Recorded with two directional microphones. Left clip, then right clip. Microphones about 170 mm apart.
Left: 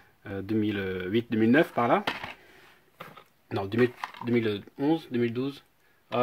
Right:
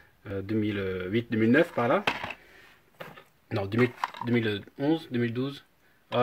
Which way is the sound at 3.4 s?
45° left (ahead or behind).